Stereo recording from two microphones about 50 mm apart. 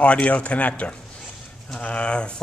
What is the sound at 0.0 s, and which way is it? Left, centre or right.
Speech, left.